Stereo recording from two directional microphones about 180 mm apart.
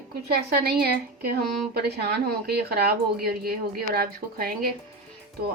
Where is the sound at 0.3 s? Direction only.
60° right (ahead or behind).